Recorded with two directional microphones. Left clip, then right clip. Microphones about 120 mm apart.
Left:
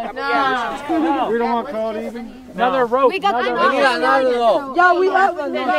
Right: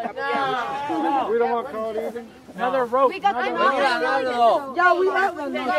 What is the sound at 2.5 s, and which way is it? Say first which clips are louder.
Speech: left 4 dB; 55° left (ahead or behind).